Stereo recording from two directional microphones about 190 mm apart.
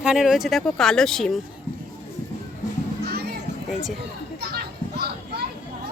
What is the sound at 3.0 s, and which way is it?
Children playing, 60° right (ahead or behind).